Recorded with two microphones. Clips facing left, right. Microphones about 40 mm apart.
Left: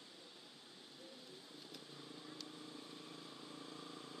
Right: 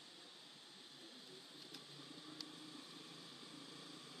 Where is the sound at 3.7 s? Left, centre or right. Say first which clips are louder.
Left 4 dB; left.